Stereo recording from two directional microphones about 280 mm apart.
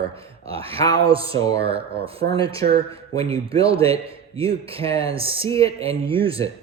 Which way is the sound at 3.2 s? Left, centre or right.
Centre.